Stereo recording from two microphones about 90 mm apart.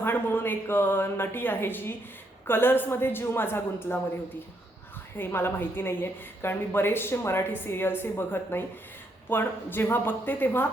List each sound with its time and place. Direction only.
0.0 s a woman's voice: 25° left (ahead or behind)
5.1 s a woman's voice: 25° left (ahead or behind)